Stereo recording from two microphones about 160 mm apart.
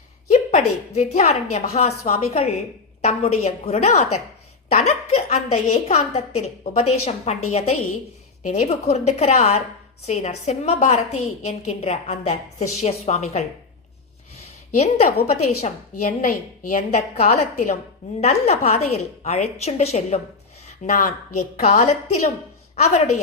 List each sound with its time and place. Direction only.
0.3 s a woman's voice: 45° left (ahead or behind)
14.8 s a woman's voice: 40° left (ahead or behind)
20.8 s a woman's voice: 55° left (ahead or behind)